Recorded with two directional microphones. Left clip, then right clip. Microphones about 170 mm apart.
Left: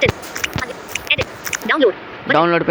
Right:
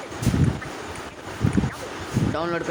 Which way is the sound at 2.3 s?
25° left (ahead or behind).